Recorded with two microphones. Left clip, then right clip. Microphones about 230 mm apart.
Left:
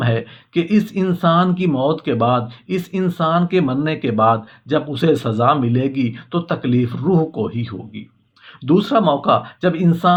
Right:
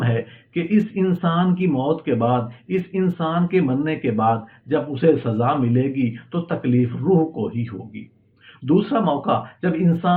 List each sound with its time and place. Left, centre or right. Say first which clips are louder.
0.0 s speech: left 3 dB; left